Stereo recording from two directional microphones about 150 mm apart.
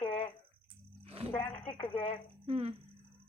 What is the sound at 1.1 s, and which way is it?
Speech, 40° right (ahead or behind).